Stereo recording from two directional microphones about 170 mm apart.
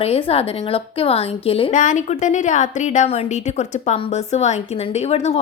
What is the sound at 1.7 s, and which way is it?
A woman's voice, 50° left (ahead or behind).